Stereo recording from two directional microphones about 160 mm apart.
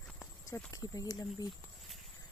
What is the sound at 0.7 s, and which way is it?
Speech, 20° left (ahead or behind).